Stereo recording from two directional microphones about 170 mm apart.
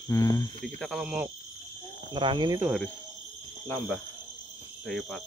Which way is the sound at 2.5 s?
5° right (ahead or behind).